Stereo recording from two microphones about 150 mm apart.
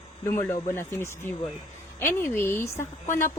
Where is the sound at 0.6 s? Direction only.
15° left (ahead or behind).